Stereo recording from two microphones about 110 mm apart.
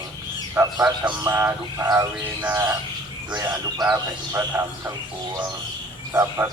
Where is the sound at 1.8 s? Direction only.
35° right (ahead or behind).